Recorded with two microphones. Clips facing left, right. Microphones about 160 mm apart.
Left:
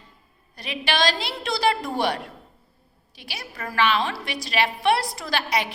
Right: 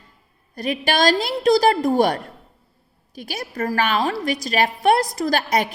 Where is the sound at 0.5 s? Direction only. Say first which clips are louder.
Right 5 dB; 45° right (ahead or behind).